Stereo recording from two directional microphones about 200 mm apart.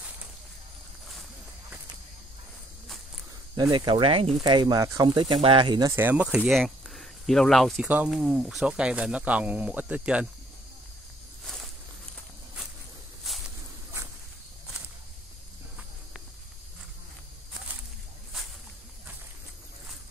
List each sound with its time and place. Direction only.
3.5 s speech: 20° right (ahead or behind); by 10.2 s 5° right (ahead or behind)
11.4 s walk: centre (ahead or behind)
13.3 s a sound: centre (ahead or behind)